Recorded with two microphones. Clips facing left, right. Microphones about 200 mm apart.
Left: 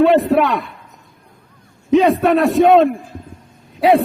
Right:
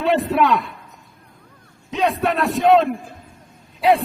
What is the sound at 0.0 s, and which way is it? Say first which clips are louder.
Speech: left 7 dB; 55° left (ahead or behind).